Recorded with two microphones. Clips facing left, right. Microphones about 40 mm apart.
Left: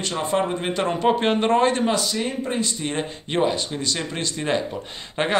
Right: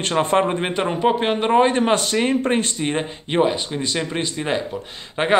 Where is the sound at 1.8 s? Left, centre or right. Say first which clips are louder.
Right 4 dB; right.